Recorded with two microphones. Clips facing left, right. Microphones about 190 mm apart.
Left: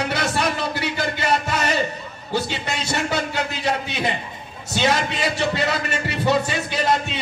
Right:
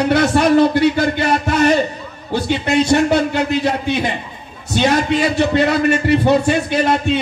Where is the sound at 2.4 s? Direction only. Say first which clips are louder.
Right 12 dB; 60° right (ahead or behind).